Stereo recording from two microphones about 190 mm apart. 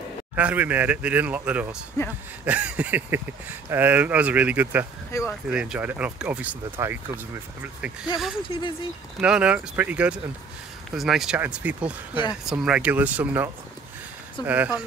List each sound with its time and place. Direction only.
0.4 s speech: 10° right (ahead or behind)
5.1 s speech: 15° left (ahead or behind)
5.5 s speech: 5° right (ahead or behind)
8.4 s speech: 25° left (ahead or behind)
9.2 s speech: 5° right (ahead or behind)